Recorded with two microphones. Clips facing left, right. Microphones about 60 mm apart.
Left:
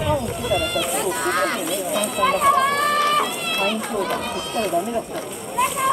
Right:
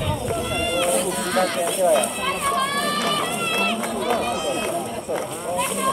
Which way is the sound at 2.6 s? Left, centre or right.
Left.